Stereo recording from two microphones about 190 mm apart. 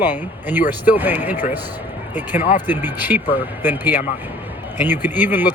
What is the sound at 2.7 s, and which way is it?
Speech, 10° right (ahead or behind).